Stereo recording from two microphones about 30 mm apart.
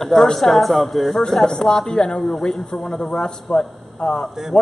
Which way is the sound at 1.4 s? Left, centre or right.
Left.